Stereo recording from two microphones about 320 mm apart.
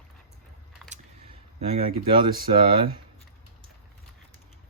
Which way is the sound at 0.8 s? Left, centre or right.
Right.